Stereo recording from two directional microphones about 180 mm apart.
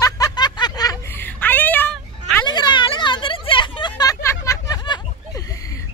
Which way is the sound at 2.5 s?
25° left (ahead or behind).